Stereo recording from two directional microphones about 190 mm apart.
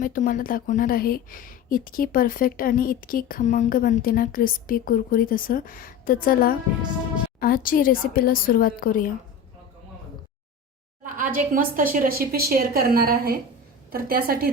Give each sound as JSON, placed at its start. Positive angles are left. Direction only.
{"t": 0.0, "sound": "speech", "side_deg": 45}
{"t": 11.0, "sound": "a woman's voice", "side_deg": -45}